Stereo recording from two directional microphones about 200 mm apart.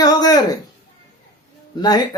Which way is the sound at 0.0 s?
20° left (ahead or behind).